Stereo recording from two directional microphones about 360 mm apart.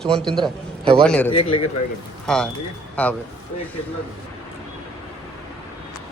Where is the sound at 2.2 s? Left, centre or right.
Centre.